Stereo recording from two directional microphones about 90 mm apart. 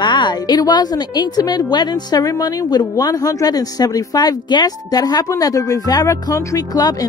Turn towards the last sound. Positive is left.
turn(degrees=45)  # may be behind; listen again after turning